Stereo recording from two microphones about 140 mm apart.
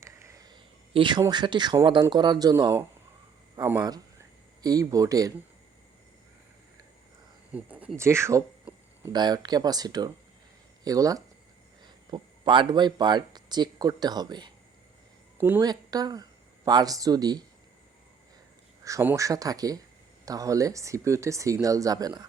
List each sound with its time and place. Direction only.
0.0 s a sound: 20° right (ahead or behind)
1.3 s speech: 30° right (ahead or behind)
3.8 s speech: 25° right (ahead or behind)
7.5 s speech: 10° right (ahead or behind)
9.1 s speech: 30° right (ahead or behind)
15.4 s a woman's voice: 15° right (ahead or behind)
15.6 s speech: 30° right (ahead or behind)
18.9 s speech: 20° right (ahead or behind)